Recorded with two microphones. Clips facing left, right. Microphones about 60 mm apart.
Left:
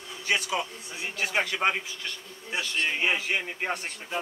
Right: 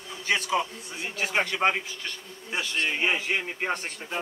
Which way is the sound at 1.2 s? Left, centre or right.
Centre.